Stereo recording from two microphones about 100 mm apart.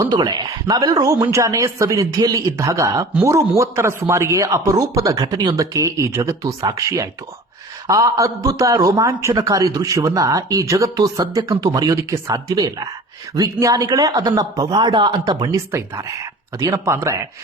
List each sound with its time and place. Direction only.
0.1 s a man's voice: 45° right (ahead or behind)
15.7 s a man's voice: 30° right (ahead or behind)